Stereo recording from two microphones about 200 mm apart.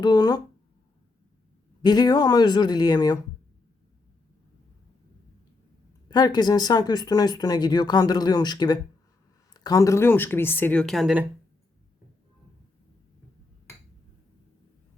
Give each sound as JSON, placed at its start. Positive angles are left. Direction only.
{"t": 0.0, "sound": "speech", "side_deg": 20}
{"t": 1.8, "sound": "speech", "side_deg": 20}
{"t": 6.1, "sound": "speech", "side_deg": 20}